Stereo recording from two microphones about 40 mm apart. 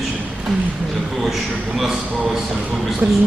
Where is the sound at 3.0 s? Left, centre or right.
Right.